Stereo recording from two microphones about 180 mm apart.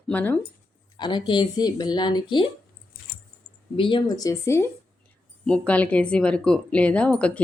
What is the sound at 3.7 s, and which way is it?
Speech, 25° left (ahead or behind).